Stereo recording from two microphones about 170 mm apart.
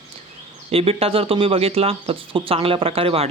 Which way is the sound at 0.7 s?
35° right (ahead or behind).